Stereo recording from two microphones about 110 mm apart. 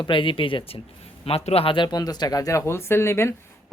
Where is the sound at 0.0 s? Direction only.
50° left (ahead or behind).